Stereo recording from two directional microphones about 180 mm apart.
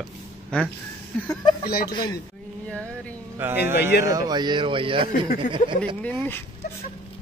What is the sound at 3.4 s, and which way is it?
Speech, 10° right (ahead or behind).